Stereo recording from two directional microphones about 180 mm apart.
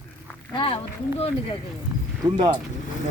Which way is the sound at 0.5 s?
30° left (ahead or behind).